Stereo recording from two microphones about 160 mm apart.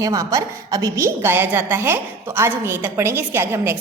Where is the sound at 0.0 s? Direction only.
20° right (ahead or behind).